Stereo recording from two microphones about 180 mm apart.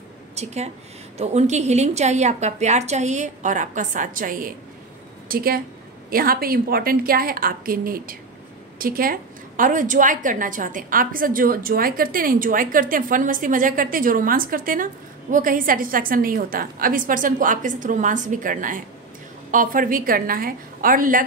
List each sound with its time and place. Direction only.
0.4 s a woman's voice: 35° right (ahead or behind)